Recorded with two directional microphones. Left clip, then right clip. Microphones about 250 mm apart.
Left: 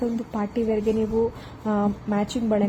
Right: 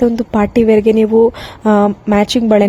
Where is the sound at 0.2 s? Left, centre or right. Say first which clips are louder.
Right 14 dB; right.